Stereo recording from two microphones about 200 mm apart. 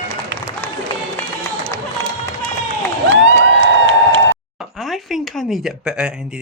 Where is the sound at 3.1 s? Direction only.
70° right (ahead or behind).